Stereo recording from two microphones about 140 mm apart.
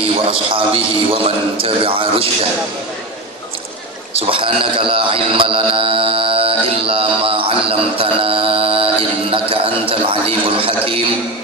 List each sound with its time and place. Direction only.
0.0 s speech: 40° right (ahead or behind)
4.1 s speech: 40° right (ahead or behind)